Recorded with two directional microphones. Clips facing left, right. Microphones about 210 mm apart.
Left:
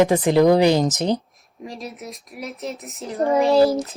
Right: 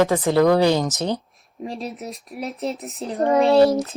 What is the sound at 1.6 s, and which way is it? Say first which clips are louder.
Speech: right 3 dB; 30° right (ahead or behind).